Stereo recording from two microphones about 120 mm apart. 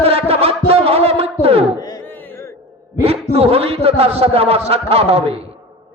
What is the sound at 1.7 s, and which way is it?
Music, 30° left (ahead or behind).